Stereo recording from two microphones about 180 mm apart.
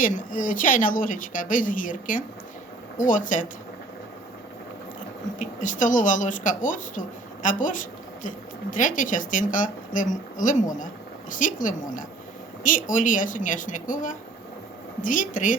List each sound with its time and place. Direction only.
0.0 s speech: 50° left (ahead or behind)
5.4 s speech: 45° left (ahead or behind)